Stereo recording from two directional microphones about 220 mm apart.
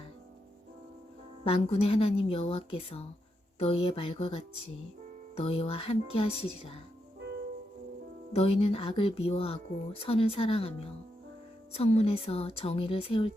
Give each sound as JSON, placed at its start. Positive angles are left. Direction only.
{"t": 1.5, "sound": "speech", "side_deg": 25}
{"t": 8.3, "sound": "speech", "side_deg": 25}